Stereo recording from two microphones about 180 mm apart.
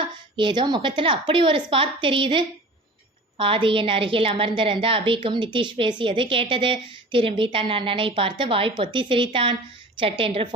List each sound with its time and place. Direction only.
0.0 s a woman's voice: 25° right (ahead or behind)